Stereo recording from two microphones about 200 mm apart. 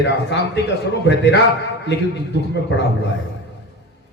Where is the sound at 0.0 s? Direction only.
60° left (ahead or behind).